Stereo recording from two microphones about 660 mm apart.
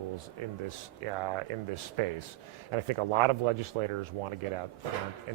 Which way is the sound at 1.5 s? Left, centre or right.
Right.